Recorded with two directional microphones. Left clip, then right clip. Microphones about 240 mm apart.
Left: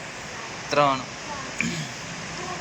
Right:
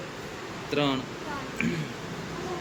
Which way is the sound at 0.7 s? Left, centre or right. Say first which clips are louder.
Left 7 dB; centre.